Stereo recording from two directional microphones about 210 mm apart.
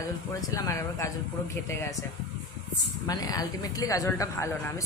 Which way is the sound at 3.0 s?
20° left (ahead or behind).